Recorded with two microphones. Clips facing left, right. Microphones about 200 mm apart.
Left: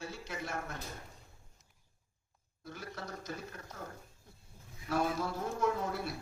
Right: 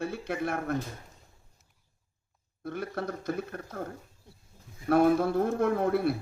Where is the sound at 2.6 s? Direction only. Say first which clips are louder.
Right 11 dB; 60° right (ahead or behind).